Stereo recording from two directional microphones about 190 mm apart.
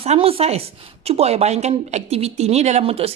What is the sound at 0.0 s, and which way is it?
A woman's voice, 30° right (ahead or behind).